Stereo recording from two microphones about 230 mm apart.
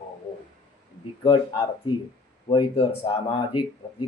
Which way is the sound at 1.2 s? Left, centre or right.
Left.